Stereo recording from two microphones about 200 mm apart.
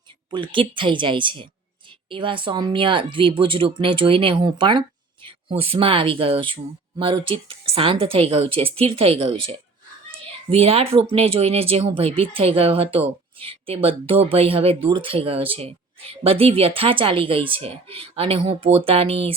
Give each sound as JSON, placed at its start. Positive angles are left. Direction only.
{"t": 0.3, "sound": "speech", "side_deg": -25}